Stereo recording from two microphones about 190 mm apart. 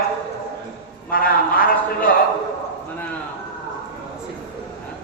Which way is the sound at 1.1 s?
50° left (ahead or behind).